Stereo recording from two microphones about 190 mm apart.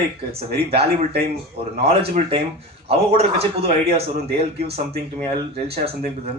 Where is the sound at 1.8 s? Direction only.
30° right (ahead or behind).